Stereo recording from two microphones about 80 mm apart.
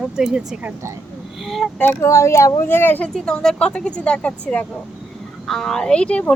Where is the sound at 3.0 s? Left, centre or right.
Centre.